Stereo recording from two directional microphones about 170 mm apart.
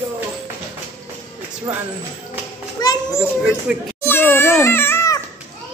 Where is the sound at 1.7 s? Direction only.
25° right (ahead or behind).